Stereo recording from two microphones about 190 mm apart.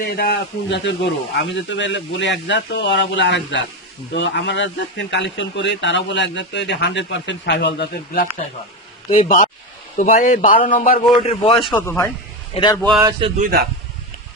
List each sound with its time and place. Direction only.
0.2 s speech: 60° left (ahead or behind)
9.0 s a man's voice: 45° left (ahead or behind)
11.6 s a man's voice: 10° left (ahead or behind)
12.5 s a man's voice: 25° left (ahead or behind)
13.1 s a man's voice: 25° right (ahead or behind)
13.4 s speech: 55° right (ahead or behind)